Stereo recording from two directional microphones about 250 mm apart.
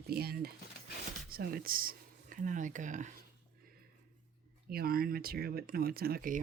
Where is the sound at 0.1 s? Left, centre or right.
Right.